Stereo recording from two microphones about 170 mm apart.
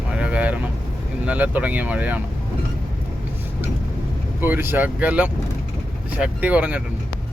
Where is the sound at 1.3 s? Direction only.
10° right (ahead or behind).